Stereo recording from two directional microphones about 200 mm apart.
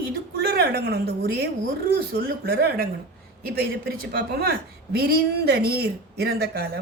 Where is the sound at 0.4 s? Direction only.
55° right (ahead or behind).